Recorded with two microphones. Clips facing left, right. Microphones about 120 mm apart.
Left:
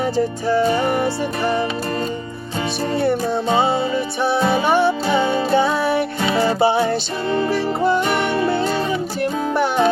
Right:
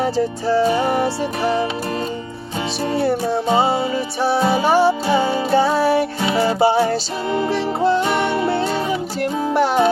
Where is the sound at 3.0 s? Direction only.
35° right (ahead or behind).